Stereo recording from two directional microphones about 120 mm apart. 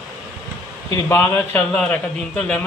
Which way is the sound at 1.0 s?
20° left (ahead or behind).